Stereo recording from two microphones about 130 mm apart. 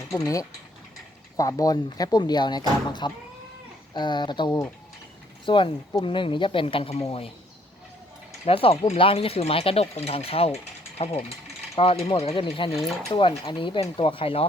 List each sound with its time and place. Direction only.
0.1 s speech: 25° left (ahead or behind); by 7.0 s 45° left (ahead or behind)
8.4 s speech: 45° left (ahead or behind)
12.7 s speech: centre (ahead or behind)
13.1 s speech: 40° left (ahead or behind)